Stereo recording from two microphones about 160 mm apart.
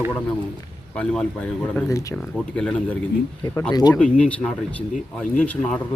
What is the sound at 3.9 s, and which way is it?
Speech, 5° left (ahead or behind).